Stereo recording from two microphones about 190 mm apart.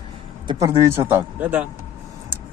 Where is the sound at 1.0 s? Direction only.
10° right (ahead or behind).